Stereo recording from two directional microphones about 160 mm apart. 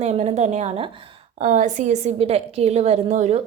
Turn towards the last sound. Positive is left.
turn(degrees=-45)  # may be behind; listen again after turning